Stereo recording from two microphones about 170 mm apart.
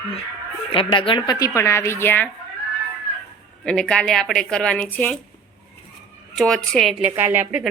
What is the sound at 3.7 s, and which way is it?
A woman's voice, 5° left (ahead or behind).